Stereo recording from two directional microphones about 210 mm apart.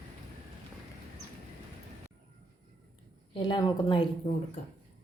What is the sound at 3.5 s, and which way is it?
Speech, 20° left (ahead or behind).